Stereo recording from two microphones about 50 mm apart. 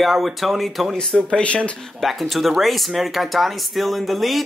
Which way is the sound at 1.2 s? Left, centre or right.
Left.